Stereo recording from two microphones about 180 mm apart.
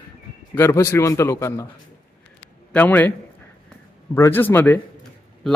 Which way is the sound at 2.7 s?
10° left (ahead or behind).